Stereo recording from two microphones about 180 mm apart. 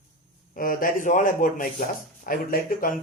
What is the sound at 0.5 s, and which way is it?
Speech, 50° left (ahead or behind).